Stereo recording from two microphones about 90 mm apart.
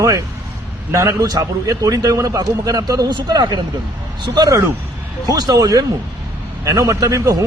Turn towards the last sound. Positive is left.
turn(degrees=-35)  # may be behind; listen again after turning